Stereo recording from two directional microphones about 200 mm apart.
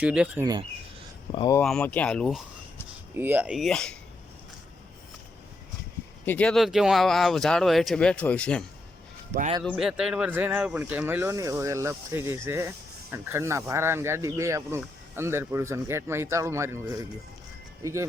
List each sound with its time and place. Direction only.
0.0 s speech: 5° right (ahead or behind)
1.3 s speech: 25° left (ahead or behind)
1.5 s speech: 5° left (ahead or behind)
3.2 s speech: 10° right (ahead or behind)
6.2 s speech: 5° left (ahead or behind)
9.6 s speech: centre (ahead or behind)